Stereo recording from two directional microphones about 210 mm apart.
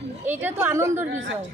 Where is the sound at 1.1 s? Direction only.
60° right (ahead or behind).